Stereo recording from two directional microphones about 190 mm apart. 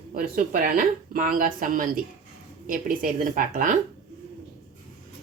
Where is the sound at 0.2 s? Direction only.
50° right (ahead or behind).